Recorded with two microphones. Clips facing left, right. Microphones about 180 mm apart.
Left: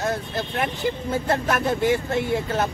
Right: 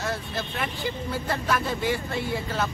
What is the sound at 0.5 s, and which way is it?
Speech, 50° left (ahead or behind).